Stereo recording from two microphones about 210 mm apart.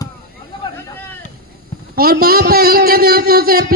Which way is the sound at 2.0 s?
45° right (ahead or behind).